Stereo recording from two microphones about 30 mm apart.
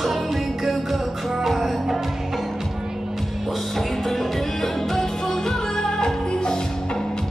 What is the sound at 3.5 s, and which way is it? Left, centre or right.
Music, centre.